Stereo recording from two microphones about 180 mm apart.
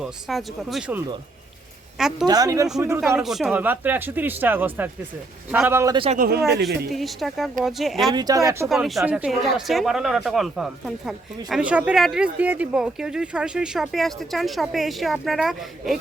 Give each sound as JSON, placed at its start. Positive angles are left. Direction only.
{"t": 0.0, "sound": "speech", "side_deg": 0}
{"t": 2.2, "sound": "speech", "side_deg": -20}
{"t": 6.1, "sound": "speech", "side_deg": -55}
{"t": 6.9, "sound": "speech", "side_deg": 0}
{"t": 8.1, "sound": "speech", "side_deg": -20}
{"t": 8.6, "sound": "speech", "side_deg": 0}